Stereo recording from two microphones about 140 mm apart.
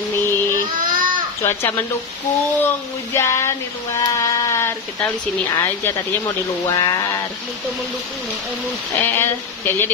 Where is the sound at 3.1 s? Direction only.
20° left (ahead or behind).